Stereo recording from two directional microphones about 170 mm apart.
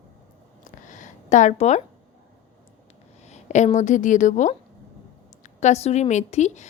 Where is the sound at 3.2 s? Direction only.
45° left (ahead or behind).